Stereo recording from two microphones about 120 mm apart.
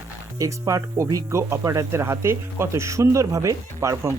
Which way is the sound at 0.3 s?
25° right (ahead or behind).